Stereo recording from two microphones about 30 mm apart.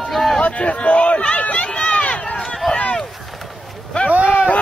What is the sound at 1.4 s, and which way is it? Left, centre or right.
Run, left.